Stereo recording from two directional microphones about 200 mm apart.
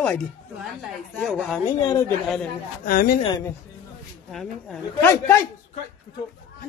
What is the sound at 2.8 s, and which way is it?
Speech, 45° left (ahead or behind).